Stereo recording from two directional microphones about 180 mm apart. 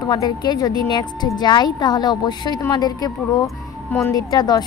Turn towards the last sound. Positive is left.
turn(degrees=20)  # may be behind; listen again after turning